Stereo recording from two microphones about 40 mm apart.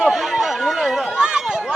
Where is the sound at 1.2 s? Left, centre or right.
Centre.